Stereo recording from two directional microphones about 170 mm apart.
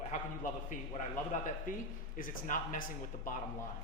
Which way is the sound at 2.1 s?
55° left (ahead or behind).